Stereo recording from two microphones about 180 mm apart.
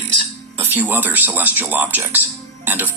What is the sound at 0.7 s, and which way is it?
Speech, 10° right (ahead or behind).